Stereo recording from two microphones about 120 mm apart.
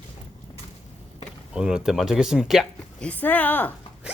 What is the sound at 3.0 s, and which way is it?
Speech, 15° left (ahead or behind).